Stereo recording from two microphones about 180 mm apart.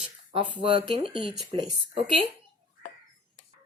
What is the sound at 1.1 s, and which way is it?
Speech, 5° right (ahead or behind).